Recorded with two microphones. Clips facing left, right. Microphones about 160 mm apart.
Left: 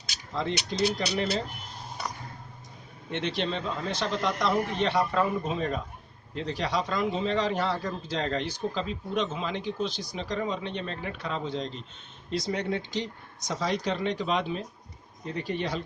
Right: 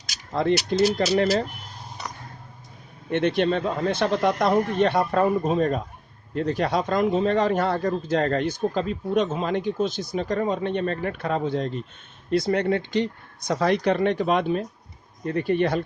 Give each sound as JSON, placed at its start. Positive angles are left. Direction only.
{"t": 0.4, "sound": "speech", "side_deg": -55}
{"t": 3.1, "sound": "a man's voice", "side_deg": -55}